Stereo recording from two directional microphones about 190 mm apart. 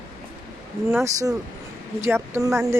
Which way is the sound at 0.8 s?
15° right (ahead or behind).